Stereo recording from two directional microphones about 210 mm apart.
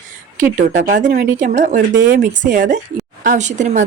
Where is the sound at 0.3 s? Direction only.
35° right (ahead or behind).